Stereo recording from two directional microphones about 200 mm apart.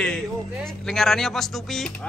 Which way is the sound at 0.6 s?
Centre (ahead or behind).